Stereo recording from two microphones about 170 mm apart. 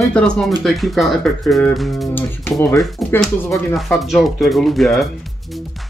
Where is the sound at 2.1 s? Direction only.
15° left (ahead or behind).